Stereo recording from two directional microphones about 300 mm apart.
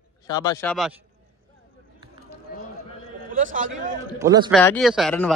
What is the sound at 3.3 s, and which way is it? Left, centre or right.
Speech, right.